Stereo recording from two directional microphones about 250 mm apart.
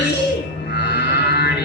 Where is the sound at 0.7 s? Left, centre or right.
Left.